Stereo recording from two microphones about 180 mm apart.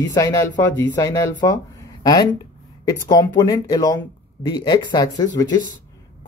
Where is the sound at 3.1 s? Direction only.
20° left (ahead or behind).